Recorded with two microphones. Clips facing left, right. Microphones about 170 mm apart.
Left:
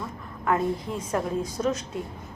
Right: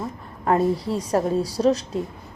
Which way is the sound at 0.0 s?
35° right (ahead or behind).